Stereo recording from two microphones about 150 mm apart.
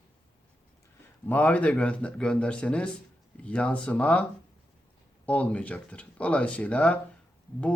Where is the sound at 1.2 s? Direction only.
10° left (ahead or behind).